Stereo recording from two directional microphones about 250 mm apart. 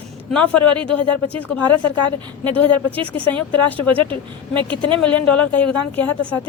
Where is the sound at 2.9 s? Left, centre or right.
Right.